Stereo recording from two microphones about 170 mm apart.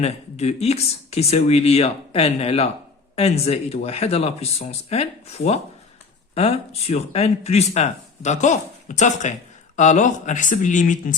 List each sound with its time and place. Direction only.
0.0 s speech: 40° left (ahead or behind)